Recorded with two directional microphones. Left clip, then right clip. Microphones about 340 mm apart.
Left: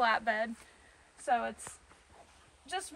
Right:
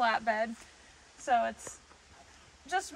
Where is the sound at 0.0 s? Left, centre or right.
Centre.